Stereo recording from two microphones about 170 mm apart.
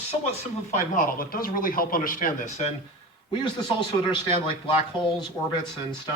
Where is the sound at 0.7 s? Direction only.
50° left (ahead or behind).